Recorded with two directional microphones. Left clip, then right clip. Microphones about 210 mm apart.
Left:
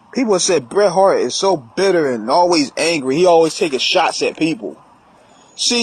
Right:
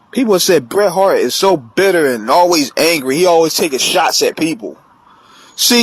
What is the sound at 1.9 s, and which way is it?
Speech, 55° right (ahead or behind).